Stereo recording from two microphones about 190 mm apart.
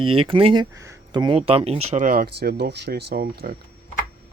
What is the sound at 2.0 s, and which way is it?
Speech, 55° right (ahead or behind).